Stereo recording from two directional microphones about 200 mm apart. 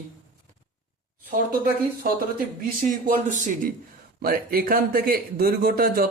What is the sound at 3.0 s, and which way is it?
A man's voice, 45° right (ahead or behind).